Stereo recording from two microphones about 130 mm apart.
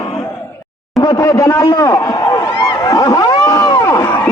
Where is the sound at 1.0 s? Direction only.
30° left (ahead or behind).